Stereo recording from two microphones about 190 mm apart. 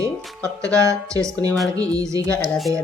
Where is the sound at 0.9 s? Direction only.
15° right (ahead or behind).